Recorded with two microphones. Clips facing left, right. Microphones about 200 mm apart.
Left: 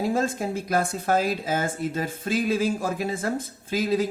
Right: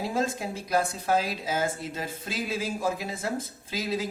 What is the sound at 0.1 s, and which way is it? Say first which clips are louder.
Speech: left 4 dB; 50° left (ahead or behind).